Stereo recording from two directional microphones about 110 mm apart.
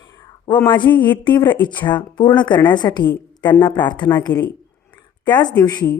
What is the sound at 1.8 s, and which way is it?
A woman's voice, 45° left (ahead or behind).